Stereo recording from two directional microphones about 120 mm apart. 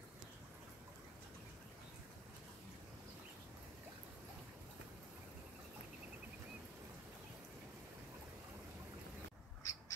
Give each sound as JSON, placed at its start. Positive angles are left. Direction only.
{"t": 9.6, "sound": "bird", "side_deg": 30}